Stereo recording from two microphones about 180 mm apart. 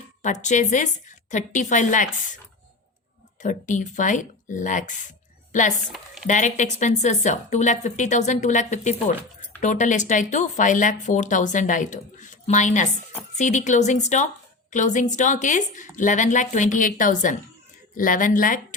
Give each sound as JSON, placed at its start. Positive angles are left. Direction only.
{"t": 0.2, "sound": "speech", "side_deg": 40}
{"t": 3.4, "sound": "speech", "side_deg": 45}
{"t": 5.8, "sound": "speech", "side_deg": 0}
{"t": 6.2, "sound": "a woman's voice", "side_deg": 40}